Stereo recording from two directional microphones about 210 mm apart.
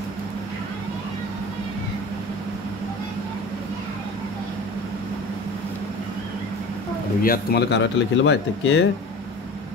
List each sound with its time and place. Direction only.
7.2 s speech: 50° left (ahead or behind)